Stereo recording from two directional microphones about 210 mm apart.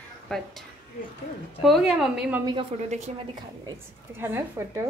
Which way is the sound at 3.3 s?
15° right (ahead or behind).